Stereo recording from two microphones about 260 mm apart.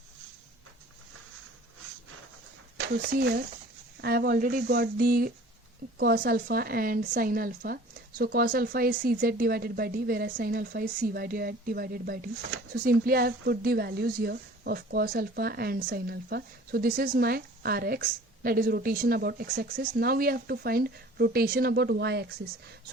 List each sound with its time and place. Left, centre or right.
2.7 s speech: right